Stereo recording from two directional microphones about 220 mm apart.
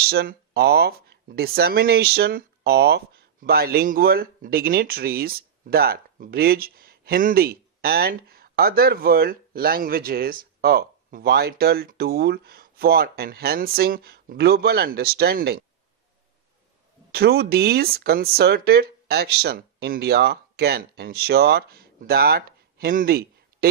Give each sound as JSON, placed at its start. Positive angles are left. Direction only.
{"t": 0.0, "sound": "speech", "side_deg": -45}
{"t": 17.1, "sound": "speech", "side_deg": -45}